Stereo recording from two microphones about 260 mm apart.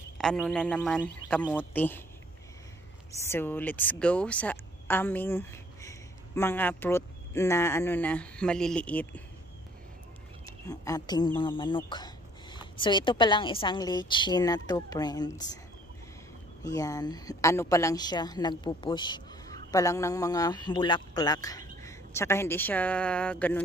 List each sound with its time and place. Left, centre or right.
0.2 s speech: centre
3.1 s speech: centre
10.4 s a woman's voice: centre
16.6 s a woman's voice: centre